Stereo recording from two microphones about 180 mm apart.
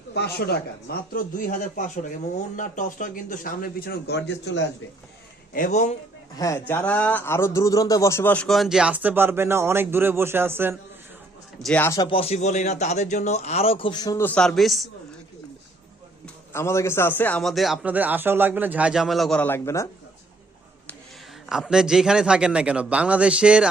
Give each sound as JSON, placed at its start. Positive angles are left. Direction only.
{"t": 0.1, "sound": "a man's voice", "side_deg": 65}
{"t": 5.5, "sound": "a man's voice", "side_deg": 45}
{"t": 6.3, "sound": "a man's voice", "side_deg": 15}
{"t": 11.6, "sound": "speech", "side_deg": 10}
{"t": 11.9, "sound": "speech", "side_deg": 30}
{"t": 14.3, "sound": "a man's voice", "side_deg": 5}
{"t": 16.2, "sound": "a man's voice", "side_deg": 15}
{"t": 21.5, "sound": "a man's voice", "side_deg": -5}